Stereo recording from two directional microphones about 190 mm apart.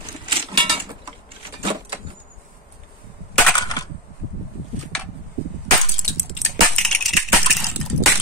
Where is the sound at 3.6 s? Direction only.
20° left (ahead or behind).